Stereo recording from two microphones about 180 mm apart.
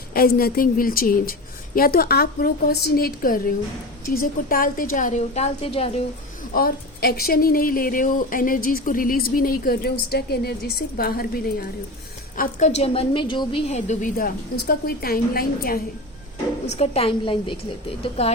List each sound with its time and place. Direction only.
0.1 s a woman's voice: 55° left (ahead or behind); by 5.9 s 30° left (ahead or behind)
6.5 s speech: 55° left (ahead or behind)
12.4 s a woman's voice: 40° left (ahead or behind)
16.6 s a woman's voice: 35° left (ahead or behind)